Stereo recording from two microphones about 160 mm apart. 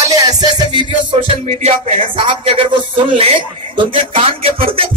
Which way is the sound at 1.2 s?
40° right (ahead or behind).